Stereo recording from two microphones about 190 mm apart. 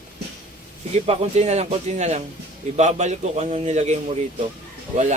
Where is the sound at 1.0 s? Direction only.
35° right (ahead or behind).